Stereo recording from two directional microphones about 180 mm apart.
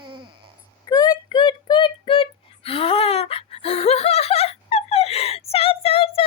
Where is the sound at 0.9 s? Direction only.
20° left (ahead or behind).